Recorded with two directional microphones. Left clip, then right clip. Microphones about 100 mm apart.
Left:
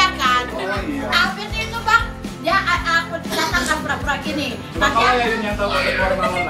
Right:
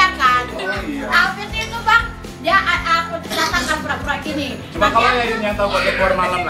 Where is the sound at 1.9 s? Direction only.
15° left (ahead or behind).